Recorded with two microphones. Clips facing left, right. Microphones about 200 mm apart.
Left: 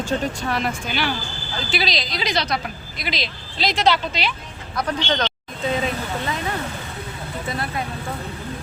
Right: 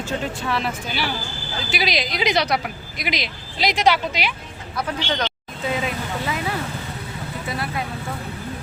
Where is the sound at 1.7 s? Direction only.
15° right (ahead or behind).